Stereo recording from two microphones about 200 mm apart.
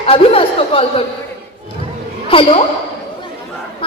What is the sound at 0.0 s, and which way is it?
Speech, 30° left (ahead or behind).